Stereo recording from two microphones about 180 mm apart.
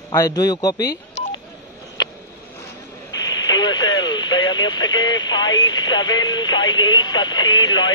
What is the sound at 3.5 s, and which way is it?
Radio, 20° left (ahead or behind).